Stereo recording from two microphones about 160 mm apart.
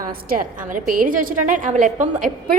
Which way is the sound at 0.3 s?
65° right (ahead or behind).